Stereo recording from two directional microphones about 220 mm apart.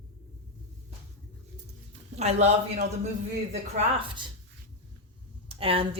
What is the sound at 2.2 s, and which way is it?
Speech, 30° right (ahead or behind).